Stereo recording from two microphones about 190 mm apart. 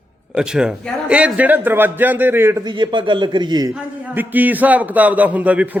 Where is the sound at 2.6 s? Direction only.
25° right (ahead or behind).